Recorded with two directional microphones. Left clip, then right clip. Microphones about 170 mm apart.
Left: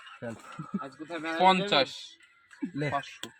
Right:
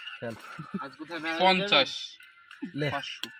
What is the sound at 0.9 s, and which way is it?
Speech, 20° left (ahead or behind).